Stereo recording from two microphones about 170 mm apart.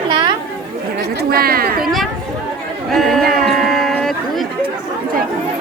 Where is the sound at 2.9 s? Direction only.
Centre (ahead or behind).